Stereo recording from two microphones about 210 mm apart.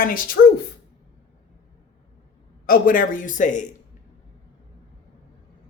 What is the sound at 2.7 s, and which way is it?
Speech, 40° left (ahead or behind).